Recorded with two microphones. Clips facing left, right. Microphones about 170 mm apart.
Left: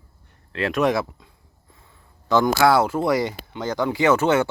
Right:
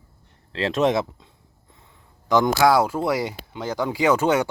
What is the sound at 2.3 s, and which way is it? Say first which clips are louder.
Speech: even; 15° right (ahead or behind).